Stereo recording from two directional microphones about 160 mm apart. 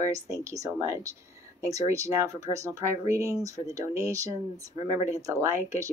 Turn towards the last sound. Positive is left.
turn(degrees=-20)  # may be behind; listen again after turning